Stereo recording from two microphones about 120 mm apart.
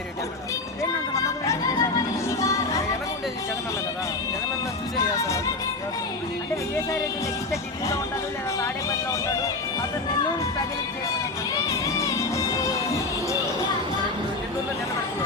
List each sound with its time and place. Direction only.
0.8 s music: 25° left (ahead or behind)
5.1 s music: 25° left (ahead or behind)
8.6 s speech: 25° left (ahead or behind)
11.7 s music: 25° left (ahead or behind)